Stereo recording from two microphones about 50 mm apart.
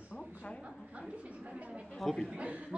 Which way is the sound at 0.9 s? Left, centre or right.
Right.